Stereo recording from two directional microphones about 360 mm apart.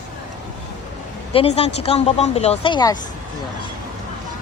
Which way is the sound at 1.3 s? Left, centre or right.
Centre.